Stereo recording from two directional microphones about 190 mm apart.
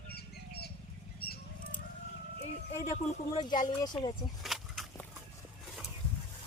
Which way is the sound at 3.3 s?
20° left (ahead or behind).